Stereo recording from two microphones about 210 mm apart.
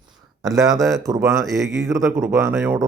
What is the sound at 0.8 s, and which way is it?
Speech, 15° right (ahead or behind).